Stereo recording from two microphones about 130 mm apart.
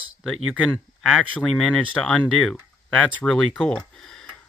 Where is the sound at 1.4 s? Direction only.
Centre (ahead or behind).